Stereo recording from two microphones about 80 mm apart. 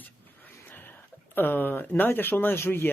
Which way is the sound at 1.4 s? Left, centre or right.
Left.